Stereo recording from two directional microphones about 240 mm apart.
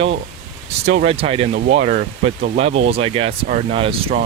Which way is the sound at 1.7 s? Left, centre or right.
Right.